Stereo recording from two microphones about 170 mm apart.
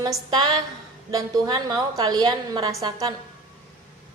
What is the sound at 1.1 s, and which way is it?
A woman's voice, 25° right (ahead or behind).